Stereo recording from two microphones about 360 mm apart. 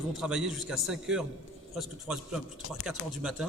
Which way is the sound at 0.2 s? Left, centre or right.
Centre.